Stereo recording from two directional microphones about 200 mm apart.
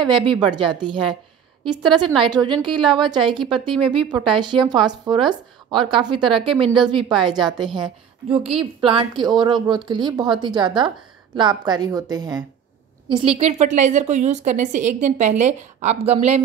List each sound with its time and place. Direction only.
0.0 s a woman's voice: 25° right (ahead or behind)